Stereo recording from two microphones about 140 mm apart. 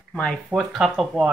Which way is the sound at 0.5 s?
5° right (ahead or behind).